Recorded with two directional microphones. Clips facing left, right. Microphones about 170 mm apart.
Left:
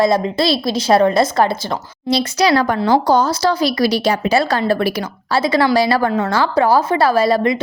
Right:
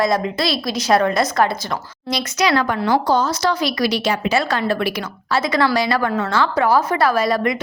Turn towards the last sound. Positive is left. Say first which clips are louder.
# left 3 dB
turn(degrees=30)  # may be behind; listen again after turning